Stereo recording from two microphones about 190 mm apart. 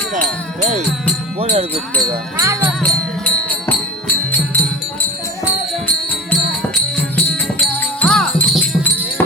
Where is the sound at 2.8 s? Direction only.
5° left (ahead or behind).